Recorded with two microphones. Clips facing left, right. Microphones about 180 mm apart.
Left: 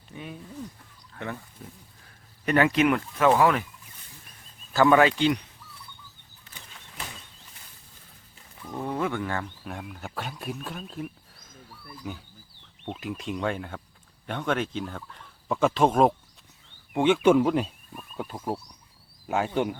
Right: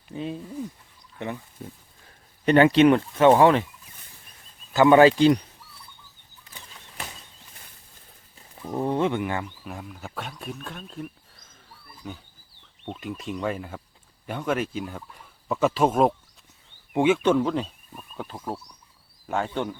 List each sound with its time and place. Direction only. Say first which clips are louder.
0.1 s speech: right 8 dB; 30° right (ahead or behind)
2.4 s speech: right 6 dB; 30° right (ahead or behind)
4.7 s speech: right 4 dB; 20° right (ahead or behind)
8.6 s speech: right 5 dB; 30° right (ahead or behind)
9.6 s speech: even; centre (ahead or behind)
17.2 s speech: left 2 dB; 10° left (ahead or behind)